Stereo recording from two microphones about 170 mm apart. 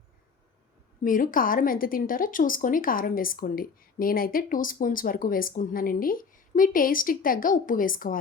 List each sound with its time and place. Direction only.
1.0 s a woman's voice: 55° left (ahead or behind)